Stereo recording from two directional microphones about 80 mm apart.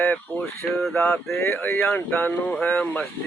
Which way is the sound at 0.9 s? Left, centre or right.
Left.